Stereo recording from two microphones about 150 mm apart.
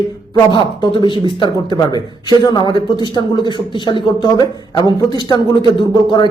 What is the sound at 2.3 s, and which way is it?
A man's voice, 30° left (ahead or behind).